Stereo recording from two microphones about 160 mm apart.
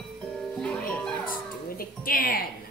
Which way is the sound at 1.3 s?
65° left (ahead or behind).